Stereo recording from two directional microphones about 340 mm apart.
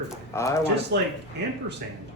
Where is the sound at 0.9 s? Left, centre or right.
Right.